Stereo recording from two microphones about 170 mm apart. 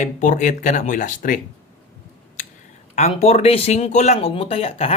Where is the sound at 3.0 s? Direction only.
40° left (ahead or behind).